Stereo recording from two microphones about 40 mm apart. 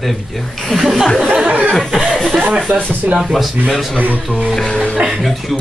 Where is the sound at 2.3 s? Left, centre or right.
Right.